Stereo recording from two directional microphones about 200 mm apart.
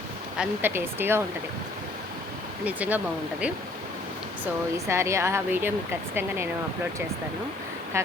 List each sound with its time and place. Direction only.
0.3 s speech: 10° right (ahead or behind)
2.6 s speech: 5° right (ahead or behind)
4.9 s speech: 15° right (ahead or behind)
7.9 s speech: 15° right (ahead or behind)